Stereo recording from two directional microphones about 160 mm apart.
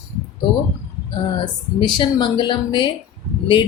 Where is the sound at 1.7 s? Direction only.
30° left (ahead or behind).